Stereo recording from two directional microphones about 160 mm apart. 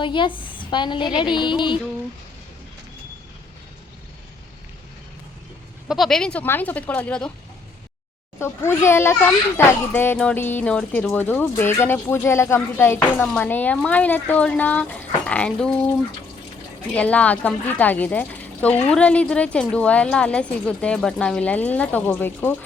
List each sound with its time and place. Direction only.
0.0 s a woman's voice: 30° left (ahead or behind)
5.9 s speech: centre (ahead or behind)
8.4 s speech: 15° left (ahead or behind)
16.9 s speech: 10° left (ahead or behind)